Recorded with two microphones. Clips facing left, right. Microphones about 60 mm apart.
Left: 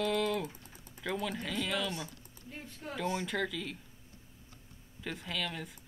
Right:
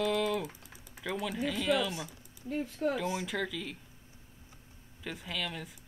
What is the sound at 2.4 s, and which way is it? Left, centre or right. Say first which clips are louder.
Speech: right 13 dB; right.